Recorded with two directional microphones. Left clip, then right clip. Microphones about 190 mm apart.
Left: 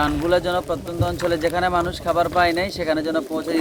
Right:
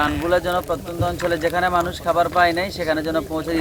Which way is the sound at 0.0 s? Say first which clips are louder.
Even; 30° left (ahead or behind).